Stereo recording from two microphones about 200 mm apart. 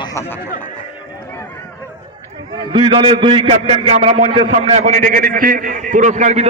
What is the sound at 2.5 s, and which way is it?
A man's voice, 20° right (ahead or behind).